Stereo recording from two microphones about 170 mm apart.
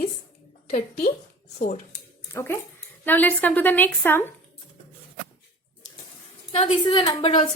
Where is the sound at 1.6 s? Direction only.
45° left (ahead or behind).